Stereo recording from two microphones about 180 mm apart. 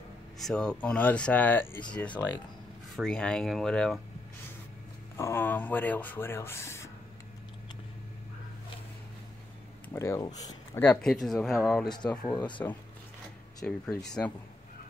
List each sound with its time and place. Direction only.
0.4 s speech: 5° left (ahead or behind)
5.1 s speech: 15° left (ahead or behind)
9.9 s speech: 15° left (ahead or behind)
10.8 s speech: 5° left (ahead or behind)
13.6 s speech: centre (ahead or behind)